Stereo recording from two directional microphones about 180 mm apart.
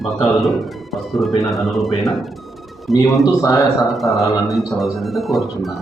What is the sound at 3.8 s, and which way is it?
A man's voice, centre (ahead or behind).